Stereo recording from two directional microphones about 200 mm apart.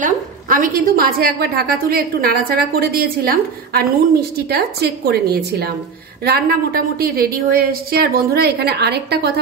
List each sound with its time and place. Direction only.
0.0 s a woman's voice: 45° right (ahead or behind)